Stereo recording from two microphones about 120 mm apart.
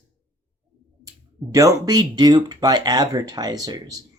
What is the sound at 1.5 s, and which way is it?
Speech, 30° right (ahead or behind).